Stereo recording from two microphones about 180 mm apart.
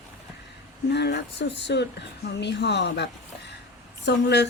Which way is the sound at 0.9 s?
70° left (ahead or behind).